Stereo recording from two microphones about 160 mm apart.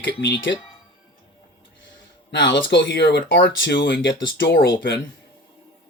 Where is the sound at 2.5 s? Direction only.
90° left.